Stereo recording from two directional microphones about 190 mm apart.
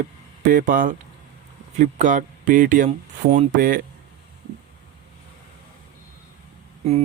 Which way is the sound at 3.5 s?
50° right (ahead or behind).